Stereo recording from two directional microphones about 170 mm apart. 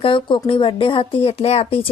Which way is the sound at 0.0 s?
30° left (ahead or behind).